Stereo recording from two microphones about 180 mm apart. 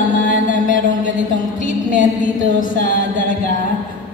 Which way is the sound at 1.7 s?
45° left (ahead or behind).